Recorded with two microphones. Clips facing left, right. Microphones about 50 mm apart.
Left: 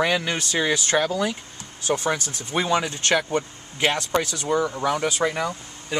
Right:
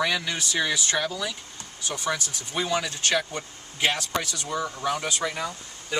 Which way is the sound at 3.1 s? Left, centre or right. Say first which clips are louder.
Left 5 dB; left.